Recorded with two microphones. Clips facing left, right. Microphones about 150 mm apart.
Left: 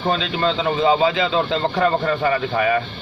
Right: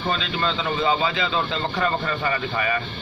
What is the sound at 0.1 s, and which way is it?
A man's voice, 75° left (ahead or behind).